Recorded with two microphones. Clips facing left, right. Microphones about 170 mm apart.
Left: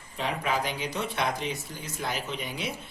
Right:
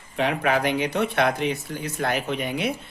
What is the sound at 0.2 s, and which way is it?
Speech, 65° right (ahead or behind).